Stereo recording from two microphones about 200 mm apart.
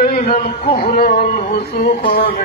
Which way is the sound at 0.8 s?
45° left (ahead or behind).